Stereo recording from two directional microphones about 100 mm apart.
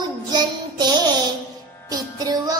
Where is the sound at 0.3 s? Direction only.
45° right (ahead or behind).